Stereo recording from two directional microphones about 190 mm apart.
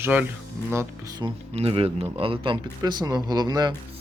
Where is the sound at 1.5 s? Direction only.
30° right (ahead or behind).